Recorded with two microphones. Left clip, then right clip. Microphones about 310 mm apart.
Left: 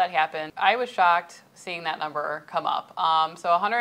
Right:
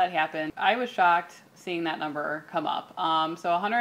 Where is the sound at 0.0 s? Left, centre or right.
Left.